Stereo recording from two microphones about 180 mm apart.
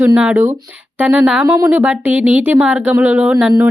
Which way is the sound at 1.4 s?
15° right (ahead or behind).